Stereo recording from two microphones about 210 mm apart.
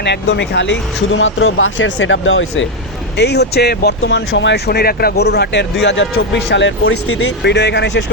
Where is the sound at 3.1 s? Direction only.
50° left (ahead or behind).